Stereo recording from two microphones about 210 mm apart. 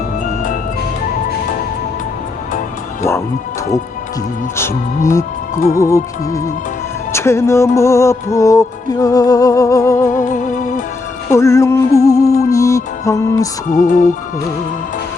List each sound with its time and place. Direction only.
4.5 s music: 15° left (ahead or behind)
10.1 s music: 40° left (ahead or behind)
11.3 s music: 15° left (ahead or behind)
13.7 s music: 40° left (ahead or behind)